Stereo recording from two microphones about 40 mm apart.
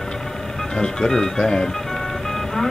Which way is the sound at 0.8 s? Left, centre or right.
Centre.